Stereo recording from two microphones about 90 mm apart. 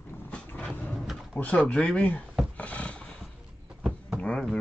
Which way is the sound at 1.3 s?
15° left (ahead or behind).